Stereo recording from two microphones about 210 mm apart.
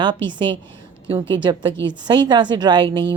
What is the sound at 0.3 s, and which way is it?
Speech, 20° right (ahead or behind).